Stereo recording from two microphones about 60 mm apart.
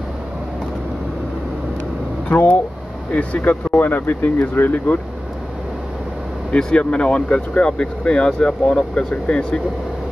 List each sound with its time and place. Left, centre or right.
2.3 s speech: left
6.5 s speech: centre